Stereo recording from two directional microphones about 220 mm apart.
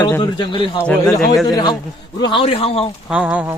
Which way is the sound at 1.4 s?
20° left (ahead or behind).